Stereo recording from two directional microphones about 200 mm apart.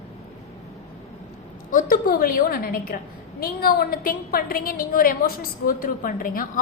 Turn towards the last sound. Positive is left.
turn(degrees=45)  # may be behind; listen again after turning